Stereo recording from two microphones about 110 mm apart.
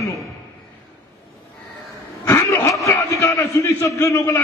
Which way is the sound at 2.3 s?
25° left (ahead or behind).